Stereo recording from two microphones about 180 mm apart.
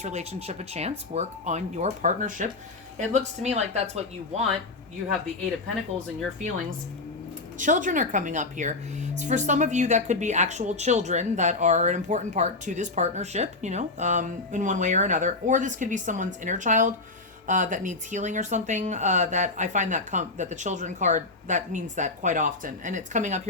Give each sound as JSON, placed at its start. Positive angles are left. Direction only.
{"t": 0.0, "sound": "speech", "side_deg": -40}
{"t": 7.6, "sound": "a woman's voice", "side_deg": -45}